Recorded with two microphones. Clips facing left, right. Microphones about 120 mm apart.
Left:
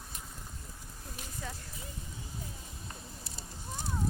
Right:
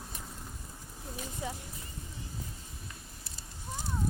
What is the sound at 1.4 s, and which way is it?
Speech, 15° right (ahead or behind).